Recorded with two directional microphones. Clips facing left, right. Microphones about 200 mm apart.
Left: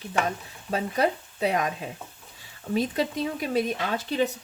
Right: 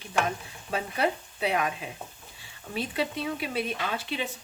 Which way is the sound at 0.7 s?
40° left (ahead or behind).